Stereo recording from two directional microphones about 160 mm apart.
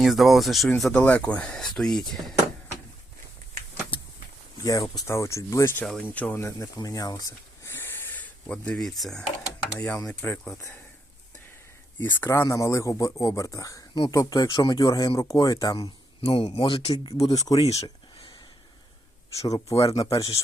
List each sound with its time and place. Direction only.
0.0 s speech: centre (ahead or behind)
4.6 s speech: 20° left (ahead or behind)
5.8 s speech: 5° left (ahead or behind)
11.9 s speech: 15° left (ahead or behind)
16.2 s speech: 35° left (ahead or behind)
17.6 s speech: 40° left (ahead or behind)
19.4 s speech: 20° left (ahead or behind)